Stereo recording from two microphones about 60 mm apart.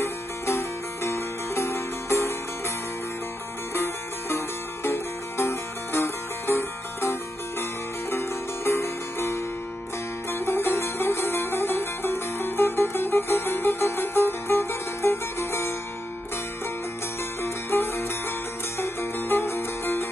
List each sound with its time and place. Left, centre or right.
0.0 s music: left
3.7 s music: left
10.4 s music: left
17.4 s music: left